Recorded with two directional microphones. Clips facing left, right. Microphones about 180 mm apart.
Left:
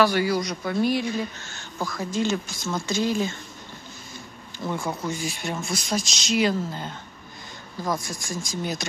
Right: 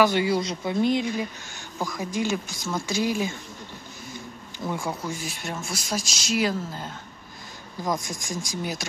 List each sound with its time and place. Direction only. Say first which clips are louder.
0.0 s speech: even; 20° right (ahead or behind)
4.6 s speech: left 1 dB; 10° right (ahead or behind)
7.8 s speech: even; 15° right (ahead or behind)